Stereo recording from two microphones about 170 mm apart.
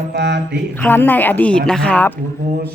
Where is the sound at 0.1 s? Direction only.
75° right (ahead or behind).